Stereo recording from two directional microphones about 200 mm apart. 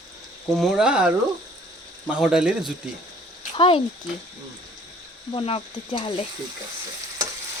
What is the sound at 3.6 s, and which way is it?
Speech, 25° left (ahead or behind).